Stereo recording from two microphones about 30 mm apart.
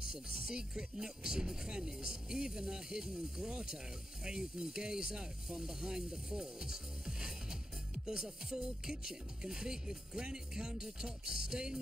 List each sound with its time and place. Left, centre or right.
0.1 s speech: right